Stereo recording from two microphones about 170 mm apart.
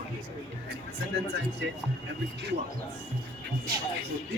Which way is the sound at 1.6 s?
90° right.